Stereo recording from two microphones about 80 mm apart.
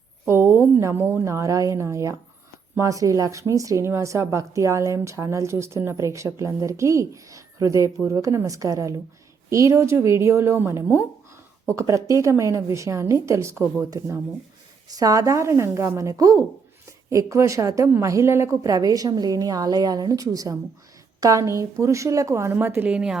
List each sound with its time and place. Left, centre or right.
0.3 s a woman's voice: right
1.2 s speech: right
14.8 s a woman's voice: right
22.9 s speech: centre